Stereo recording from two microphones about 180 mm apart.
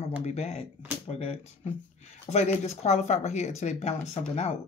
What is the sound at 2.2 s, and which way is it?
Speech, 40° left (ahead or behind).